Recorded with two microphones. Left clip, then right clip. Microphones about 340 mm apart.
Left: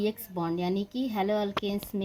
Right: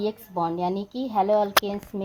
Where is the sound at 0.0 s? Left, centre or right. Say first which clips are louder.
Right 5 dB; right.